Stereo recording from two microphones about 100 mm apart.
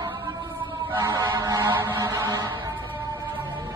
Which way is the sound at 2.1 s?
35° right (ahead or behind).